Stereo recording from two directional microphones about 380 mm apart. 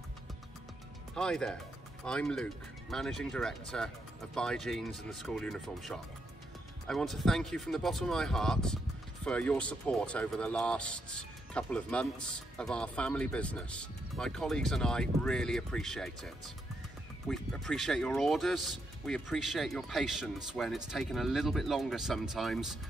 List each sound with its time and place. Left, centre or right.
1.1 s speech: centre
17.3 s speech: centre